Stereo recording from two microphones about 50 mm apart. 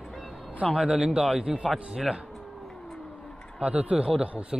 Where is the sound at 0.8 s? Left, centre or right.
Centre.